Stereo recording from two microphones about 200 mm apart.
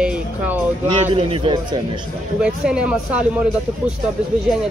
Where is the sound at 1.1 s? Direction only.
25° right (ahead or behind).